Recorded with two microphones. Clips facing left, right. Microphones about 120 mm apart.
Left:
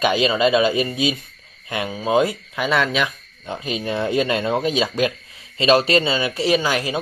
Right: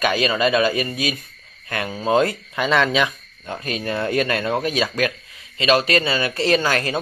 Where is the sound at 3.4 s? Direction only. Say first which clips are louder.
Left 1 dB; 15° left (ahead or behind).